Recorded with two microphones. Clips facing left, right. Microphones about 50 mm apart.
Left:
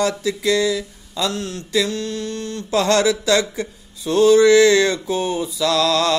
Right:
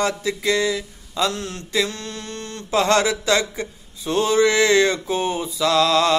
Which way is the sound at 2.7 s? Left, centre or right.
Centre.